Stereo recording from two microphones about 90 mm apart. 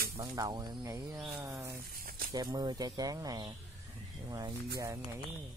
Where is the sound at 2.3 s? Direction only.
45° right (ahead or behind).